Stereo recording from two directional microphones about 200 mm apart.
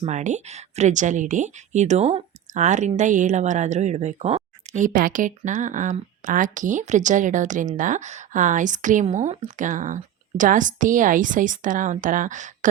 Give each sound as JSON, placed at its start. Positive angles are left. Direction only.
{"t": 0.0, "sound": "speech", "side_deg": -35}